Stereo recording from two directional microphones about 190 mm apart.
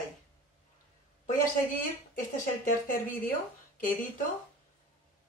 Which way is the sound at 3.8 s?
45° left (ahead or behind).